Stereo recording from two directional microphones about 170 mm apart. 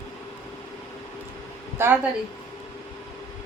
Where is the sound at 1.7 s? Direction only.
15° right (ahead or behind).